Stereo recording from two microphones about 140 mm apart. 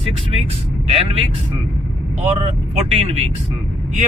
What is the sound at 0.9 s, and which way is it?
Speech, 45° right (ahead or behind).